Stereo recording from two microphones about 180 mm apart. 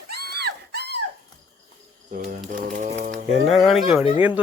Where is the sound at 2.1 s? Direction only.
50° right (ahead or behind).